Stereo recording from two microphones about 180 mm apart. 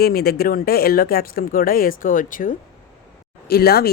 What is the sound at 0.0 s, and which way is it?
Speech, 60° left (ahead or behind).